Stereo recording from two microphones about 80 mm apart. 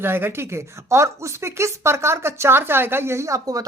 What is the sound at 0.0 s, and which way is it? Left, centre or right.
Speech, right.